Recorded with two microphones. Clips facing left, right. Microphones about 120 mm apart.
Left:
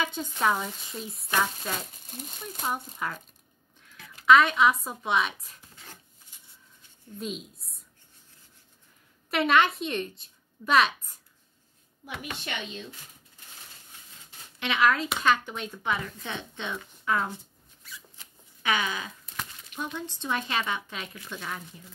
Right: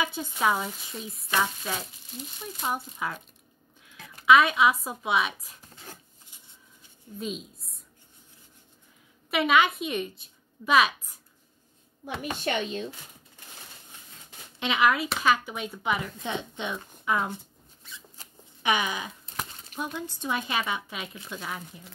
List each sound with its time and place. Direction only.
0.0 s speech: 5° right (ahead or behind)
4.3 s speech: 5° right (ahead or behind)
7.2 s a woman's voice: centre (ahead or behind)
9.3 s a woman's voice: 5° right (ahead or behind)
12.0 s speech: 35° right (ahead or behind)
14.6 s speech: 15° right (ahead or behind)
17.8 s shuffling cards: 20° right (ahead or behind)
18.6 s speech: 15° right (ahead or behind)